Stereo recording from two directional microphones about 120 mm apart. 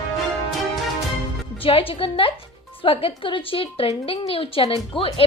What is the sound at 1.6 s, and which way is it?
A woman's voice, 50° left (ahead or behind).